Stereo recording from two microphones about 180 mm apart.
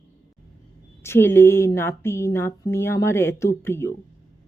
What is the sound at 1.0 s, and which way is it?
Speech, 15° left (ahead or behind).